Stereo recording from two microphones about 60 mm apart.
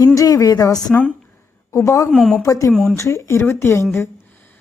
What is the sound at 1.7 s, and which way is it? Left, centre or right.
Speech, left.